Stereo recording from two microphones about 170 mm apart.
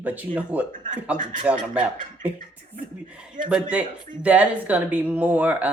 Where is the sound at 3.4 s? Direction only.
50° right (ahead or behind).